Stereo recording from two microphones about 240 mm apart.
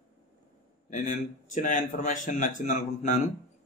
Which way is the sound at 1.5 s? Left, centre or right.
Left.